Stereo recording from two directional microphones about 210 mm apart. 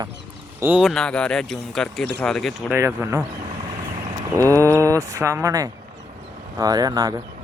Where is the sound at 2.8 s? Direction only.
10° right (ahead or behind).